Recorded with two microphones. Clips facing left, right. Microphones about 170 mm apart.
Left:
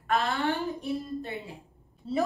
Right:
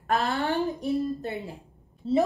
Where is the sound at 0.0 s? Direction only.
40° right (ahead or behind).